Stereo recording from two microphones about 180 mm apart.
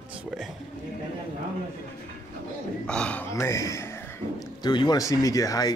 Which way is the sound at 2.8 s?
5° left (ahead or behind).